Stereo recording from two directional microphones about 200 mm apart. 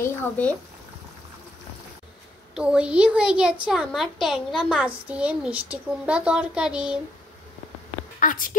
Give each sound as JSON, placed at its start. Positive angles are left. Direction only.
{"t": 0.0, "sound": "speech", "side_deg": 10}
{"t": 2.5, "sound": "a woman's voice", "side_deg": -5}
{"t": 8.2, "sound": "speech", "side_deg": 40}